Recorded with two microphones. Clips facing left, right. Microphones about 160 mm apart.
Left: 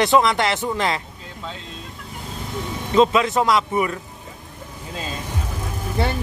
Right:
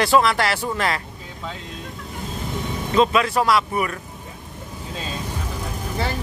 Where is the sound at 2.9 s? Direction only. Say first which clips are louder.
Left 2 dB; 20° left (ahead or behind).